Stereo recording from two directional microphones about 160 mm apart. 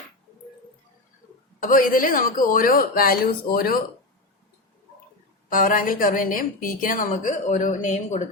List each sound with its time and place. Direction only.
1.5 s a woman's voice: 60° left (ahead or behind)
5.5 s a woman's voice: 60° left (ahead or behind)